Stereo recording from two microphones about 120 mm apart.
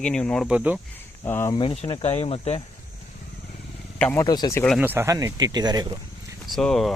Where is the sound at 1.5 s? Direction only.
50° left (ahead or behind).